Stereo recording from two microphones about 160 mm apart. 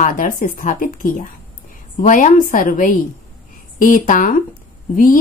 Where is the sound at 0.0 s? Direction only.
60° left (ahead or behind).